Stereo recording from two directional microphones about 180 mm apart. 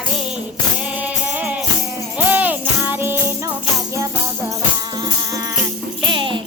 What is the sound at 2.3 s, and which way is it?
Jingle bell, 10° right (ahead or behind).